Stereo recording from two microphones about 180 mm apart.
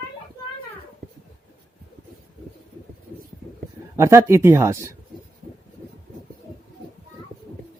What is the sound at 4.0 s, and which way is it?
Speech, 15° right (ahead or behind).